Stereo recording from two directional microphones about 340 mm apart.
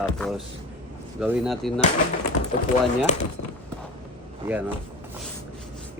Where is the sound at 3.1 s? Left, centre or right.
Left.